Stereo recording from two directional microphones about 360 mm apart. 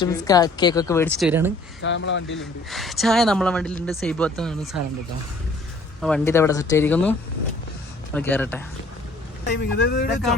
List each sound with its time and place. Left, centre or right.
0.0 s a woman's voice: centre
1.8 s speech: left
2.4 s speech: centre
6.0 s a woman's voice: centre
8.1 s speech: centre
9.4 s speech: left